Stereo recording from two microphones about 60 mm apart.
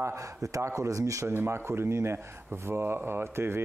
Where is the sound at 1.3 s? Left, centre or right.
Right.